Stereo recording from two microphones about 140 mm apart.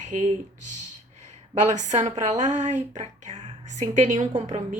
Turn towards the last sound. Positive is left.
turn(degrees=-60)  # may be behind; listen again after turning